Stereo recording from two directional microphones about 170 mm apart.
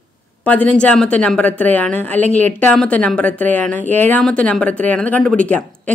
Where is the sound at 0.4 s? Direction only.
10° left (ahead or behind).